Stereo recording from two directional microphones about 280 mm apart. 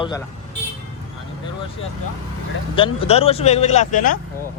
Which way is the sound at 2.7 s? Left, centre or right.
Centre.